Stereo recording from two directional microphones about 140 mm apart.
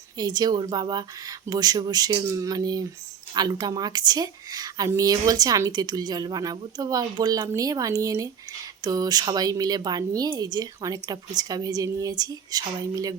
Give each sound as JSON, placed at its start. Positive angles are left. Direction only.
{"t": 0.2, "sound": "speech", "side_deg": -30}